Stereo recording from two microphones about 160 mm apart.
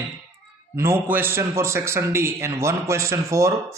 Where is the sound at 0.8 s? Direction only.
15° right (ahead or behind).